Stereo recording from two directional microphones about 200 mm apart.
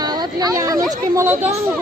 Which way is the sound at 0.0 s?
20° right (ahead or behind).